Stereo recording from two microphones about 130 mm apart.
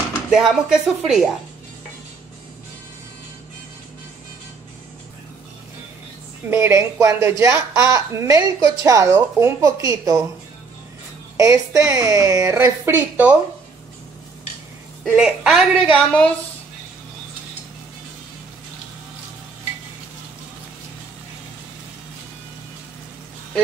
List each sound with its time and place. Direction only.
0.3 s speech: 5° right (ahead or behind)
6.5 s speech: 20° right (ahead or behind)
11.3 s speech: 25° right (ahead or behind)
15.0 s speech: 5° right (ahead or behind)
16.1 s a woman's voice: 10° left (ahead or behind)